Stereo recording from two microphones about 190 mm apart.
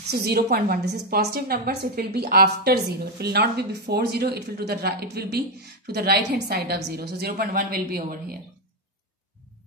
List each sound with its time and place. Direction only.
0.1 s a woman's voice: 55° right (ahead or behind)